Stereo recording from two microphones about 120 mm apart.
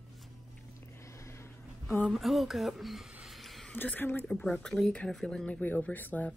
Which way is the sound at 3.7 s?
15° left (ahead or behind).